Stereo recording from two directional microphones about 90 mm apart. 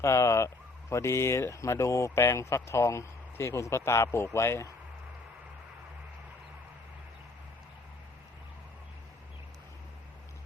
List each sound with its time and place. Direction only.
0.0 s speech: 30° left (ahead or behind)